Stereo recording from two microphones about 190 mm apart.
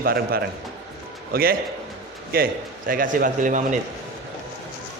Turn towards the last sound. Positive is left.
turn(degrees=-40)  # may be behind; listen again after turning